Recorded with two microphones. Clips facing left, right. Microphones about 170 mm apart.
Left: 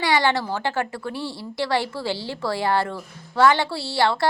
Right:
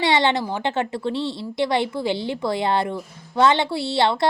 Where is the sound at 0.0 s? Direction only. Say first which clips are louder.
Right 1 dB; 20° right (ahead or behind).